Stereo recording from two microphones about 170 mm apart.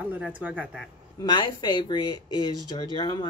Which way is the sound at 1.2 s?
25° left (ahead or behind).